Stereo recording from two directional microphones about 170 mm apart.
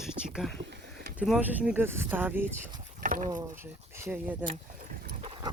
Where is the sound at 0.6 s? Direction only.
90° right.